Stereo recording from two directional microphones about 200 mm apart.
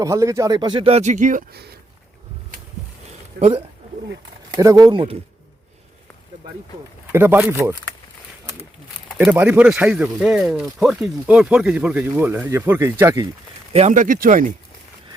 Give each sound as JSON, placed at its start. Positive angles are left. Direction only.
{"t": 0.0, "sound": "speech", "side_deg": -15}
{"t": 3.1, "sound": "a sound", "side_deg": -30}
{"t": 4.5, "sound": "speech", "side_deg": -15}
{"t": 7.1, "sound": "speech", "side_deg": -10}
{"t": 9.1, "sound": "speech", "side_deg": -5}
{"t": 13.7, "sound": "speech", "side_deg": -35}